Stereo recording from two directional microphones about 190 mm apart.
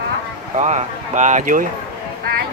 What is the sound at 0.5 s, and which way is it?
Speech, 35° right (ahead or behind).